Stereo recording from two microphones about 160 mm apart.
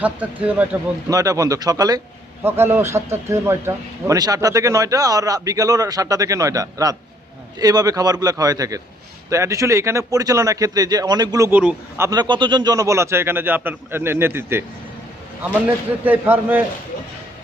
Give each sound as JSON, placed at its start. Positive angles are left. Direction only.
{"t": 0.0, "sound": "a man's voice", "side_deg": -10}
{"t": 1.1, "sound": "a man's voice", "side_deg": -20}
{"t": 12.2, "sound": "a man's voice", "side_deg": -30}
{"t": 16.0, "sound": "a man's voice", "side_deg": -10}